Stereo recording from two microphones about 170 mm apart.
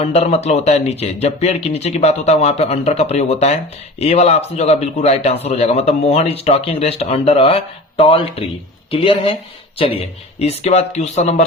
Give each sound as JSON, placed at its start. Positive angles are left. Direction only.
{"t": 0.0, "sound": "a man's voice", "side_deg": 40}